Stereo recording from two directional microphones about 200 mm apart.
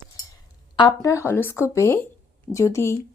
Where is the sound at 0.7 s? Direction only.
20° left (ahead or behind).